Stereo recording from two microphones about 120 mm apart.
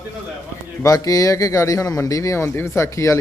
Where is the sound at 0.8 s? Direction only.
30° left (ahead or behind).